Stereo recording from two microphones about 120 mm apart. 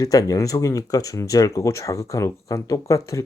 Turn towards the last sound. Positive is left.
turn(degrees=25)  # may be behind; listen again after turning